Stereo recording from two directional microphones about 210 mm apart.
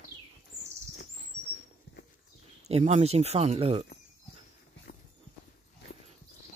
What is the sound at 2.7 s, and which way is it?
Speech, 30° right (ahead or behind).